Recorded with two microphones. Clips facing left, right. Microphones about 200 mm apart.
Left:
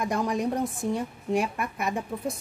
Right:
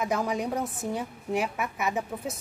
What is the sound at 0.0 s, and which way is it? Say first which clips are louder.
A woman's voice: left 1 dB; 5° right (ahead or behind).